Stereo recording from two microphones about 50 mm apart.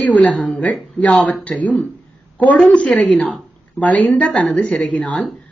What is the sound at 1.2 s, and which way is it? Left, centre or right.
A woman's voice, left.